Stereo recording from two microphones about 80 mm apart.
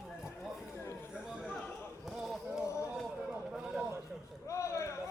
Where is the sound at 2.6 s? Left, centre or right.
Left.